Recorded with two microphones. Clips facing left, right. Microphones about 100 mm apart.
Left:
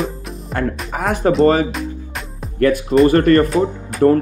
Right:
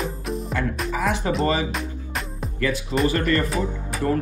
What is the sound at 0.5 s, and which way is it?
Speech, 50° left (ahead or behind).